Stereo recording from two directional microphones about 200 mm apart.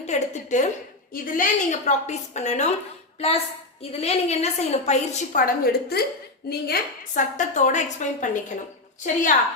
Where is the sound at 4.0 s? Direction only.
30° left (ahead or behind).